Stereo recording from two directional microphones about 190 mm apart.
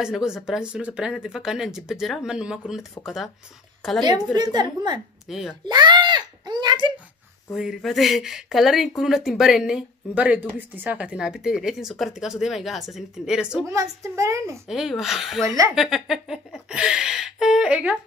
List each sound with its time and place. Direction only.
0.0 s speech: 5° right (ahead or behind)
3.8 s speech: centre (ahead or behind)
4.4 s a woman's voice: 20° right (ahead or behind)
5.3 s speech: centre (ahead or behind)
5.7 s a sound: 25° right (ahead or behind)
7.5 s speech: centre (ahead or behind)
13.7 s a child's voice: 15° right (ahead or behind)
14.7 s speech: centre (ahead or behind)
15.4 s a child's voice: 15° right (ahead or behind)
15.7 s speech: centre (ahead or behind)